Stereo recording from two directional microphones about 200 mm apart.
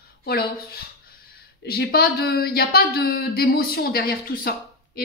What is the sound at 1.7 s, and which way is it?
Speech, 50° left (ahead or behind).